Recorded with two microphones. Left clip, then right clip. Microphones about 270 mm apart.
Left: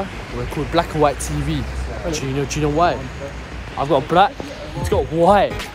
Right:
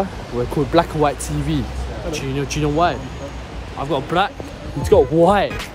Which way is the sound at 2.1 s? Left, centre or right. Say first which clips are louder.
Even; centre.